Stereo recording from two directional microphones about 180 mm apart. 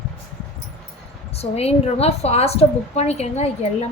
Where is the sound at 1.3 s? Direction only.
35° left (ahead or behind).